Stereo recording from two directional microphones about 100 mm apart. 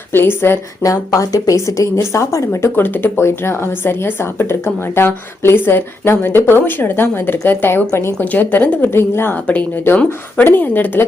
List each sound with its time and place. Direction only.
0.1 s a woman's voice: 20° left (ahead or behind)
0.8 s a woman's voice: 35° left (ahead or behind); by 11.0 s 20° left (ahead or behind)